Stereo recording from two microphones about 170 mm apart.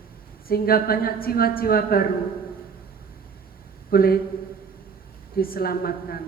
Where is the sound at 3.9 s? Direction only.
60° left (ahead or behind).